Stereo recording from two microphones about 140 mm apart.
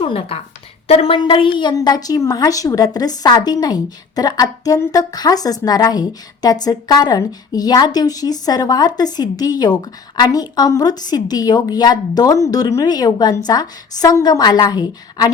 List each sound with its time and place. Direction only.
0.0 s a woman's voice: 40° left (ahead or behind)